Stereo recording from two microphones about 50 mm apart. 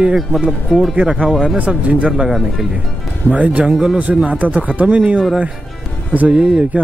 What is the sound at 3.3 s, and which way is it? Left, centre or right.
Speech, right.